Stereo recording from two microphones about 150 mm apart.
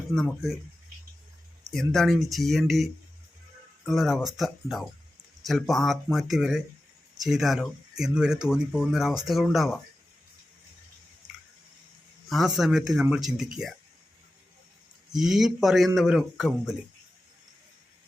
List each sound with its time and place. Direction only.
0.1 s speech: 5° left (ahead or behind)
1.9 s speech: centre (ahead or behind)
12.3 s speech: centre (ahead or behind)
15.1 s speech: centre (ahead or behind)